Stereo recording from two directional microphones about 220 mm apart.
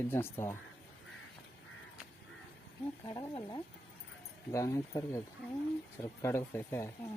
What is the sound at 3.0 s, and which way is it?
Speech, 20° left (ahead or behind).